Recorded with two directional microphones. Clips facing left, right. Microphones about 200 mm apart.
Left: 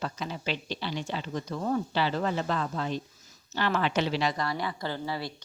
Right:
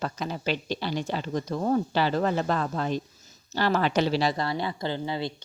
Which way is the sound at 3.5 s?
35° right (ahead or behind).